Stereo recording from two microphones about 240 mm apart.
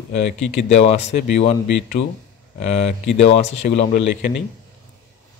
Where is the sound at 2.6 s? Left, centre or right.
Left.